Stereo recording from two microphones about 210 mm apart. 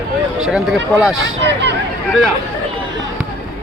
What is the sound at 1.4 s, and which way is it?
Speech, 55° right (ahead or behind).